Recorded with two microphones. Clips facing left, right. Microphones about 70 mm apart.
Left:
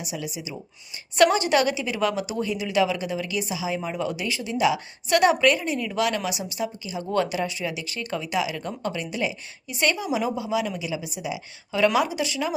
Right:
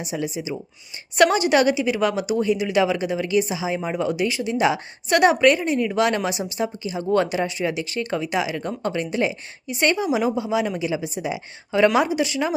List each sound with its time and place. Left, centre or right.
0.0 s a woman's voice: right
1.1 s speech: centre
10.8 s a woman's voice: right